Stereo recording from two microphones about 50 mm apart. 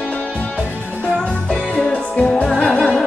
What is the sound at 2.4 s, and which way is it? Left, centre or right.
Music, centre.